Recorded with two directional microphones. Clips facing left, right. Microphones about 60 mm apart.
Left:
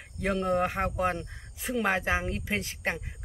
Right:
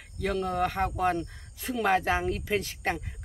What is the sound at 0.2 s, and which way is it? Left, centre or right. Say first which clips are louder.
Speech: left 1 dB; left.